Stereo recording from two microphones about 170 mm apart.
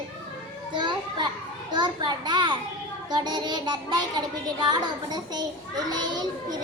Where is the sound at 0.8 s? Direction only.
25° right (ahead or behind).